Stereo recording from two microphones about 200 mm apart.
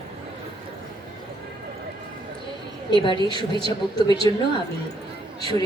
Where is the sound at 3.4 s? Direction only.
25° right (ahead or behind).